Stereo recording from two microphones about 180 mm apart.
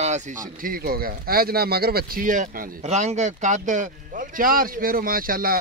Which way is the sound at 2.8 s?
40° right (ahead or behind).